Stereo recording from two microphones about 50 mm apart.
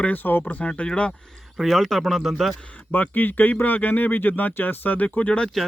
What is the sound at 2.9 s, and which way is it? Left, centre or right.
Speech, left.